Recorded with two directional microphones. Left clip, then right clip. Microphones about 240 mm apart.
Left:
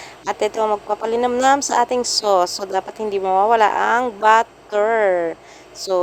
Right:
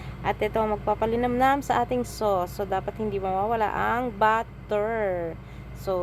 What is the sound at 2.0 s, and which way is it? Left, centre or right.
Speech, left.